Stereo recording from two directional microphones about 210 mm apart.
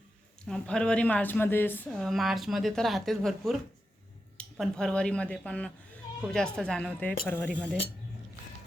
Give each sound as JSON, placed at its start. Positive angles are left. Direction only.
{"t": 0.4, "sound": "a woman's voice", "side_deg": 5}